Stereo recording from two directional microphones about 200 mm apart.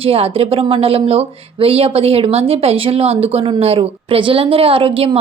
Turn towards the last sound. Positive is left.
turn(degrees=-25)  # may be behind; listen again after turning